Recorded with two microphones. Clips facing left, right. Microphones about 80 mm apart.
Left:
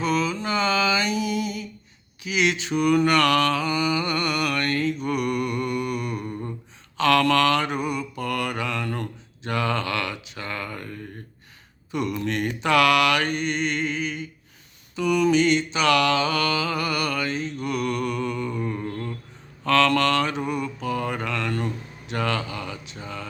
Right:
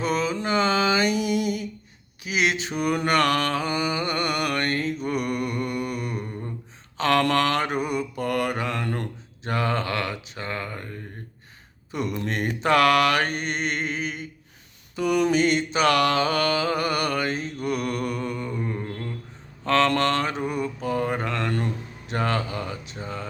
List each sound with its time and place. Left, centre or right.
0.0 s mantra: right
11.9 s mantra: right
18.9 s a sound: centre
19.6 s mantra: right